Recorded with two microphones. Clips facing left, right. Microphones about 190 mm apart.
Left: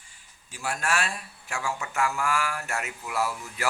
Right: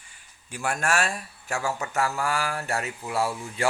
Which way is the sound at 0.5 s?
55° right (ahead or behind).